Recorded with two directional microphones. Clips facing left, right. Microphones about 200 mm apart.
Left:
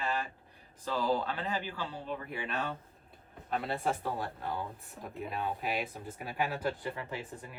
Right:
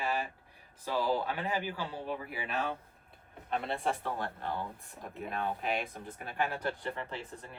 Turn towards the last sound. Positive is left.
turn(degrees=10)  # may be behind; listen again after turning